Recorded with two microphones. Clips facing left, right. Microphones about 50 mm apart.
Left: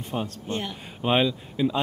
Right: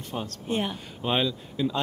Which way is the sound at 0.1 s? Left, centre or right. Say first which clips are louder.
Left 3 dB; centre.